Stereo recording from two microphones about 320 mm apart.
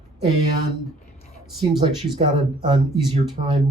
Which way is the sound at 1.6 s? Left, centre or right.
Centre.